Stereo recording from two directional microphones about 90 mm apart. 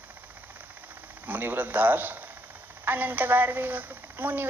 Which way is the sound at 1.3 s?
20° right (ahead or behind).